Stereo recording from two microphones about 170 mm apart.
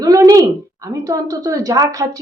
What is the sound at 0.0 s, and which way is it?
A woman's voice, 20° right (ahead or behind).